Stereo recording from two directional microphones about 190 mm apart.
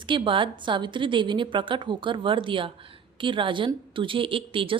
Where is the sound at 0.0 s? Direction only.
25° right (ahead or behind).